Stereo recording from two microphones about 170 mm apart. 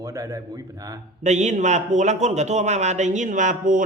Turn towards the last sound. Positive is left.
turn(degrees=-50)  # may be behind; listen again after turning